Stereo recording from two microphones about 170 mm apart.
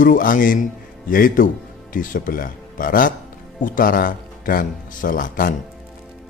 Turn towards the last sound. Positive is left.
turn(degrees=55)  # may be behind; listen again after turning